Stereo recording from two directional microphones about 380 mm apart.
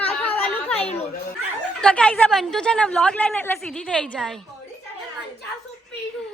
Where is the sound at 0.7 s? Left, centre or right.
Centre.